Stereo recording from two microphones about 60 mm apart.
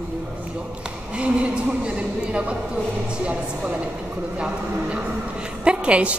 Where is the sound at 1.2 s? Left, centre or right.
Centre.